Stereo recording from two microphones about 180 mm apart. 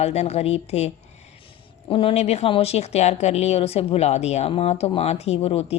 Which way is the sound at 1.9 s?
30° left (ahead or behind).